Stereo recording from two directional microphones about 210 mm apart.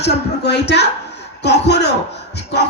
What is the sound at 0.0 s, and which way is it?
Speech, 55° left (ahead or behind).